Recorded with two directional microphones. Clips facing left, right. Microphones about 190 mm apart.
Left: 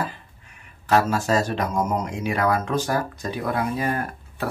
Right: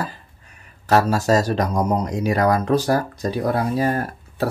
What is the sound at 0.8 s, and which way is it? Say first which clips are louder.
Speech: right 3 dB; 40° right (ahead or behind).